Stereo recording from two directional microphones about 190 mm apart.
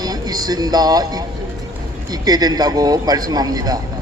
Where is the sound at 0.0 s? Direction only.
20° right (ahead or behind).